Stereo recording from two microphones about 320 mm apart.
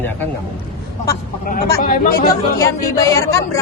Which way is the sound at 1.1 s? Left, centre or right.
Left.